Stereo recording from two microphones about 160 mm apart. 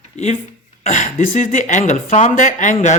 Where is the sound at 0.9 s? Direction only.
50° left (ahead or behind).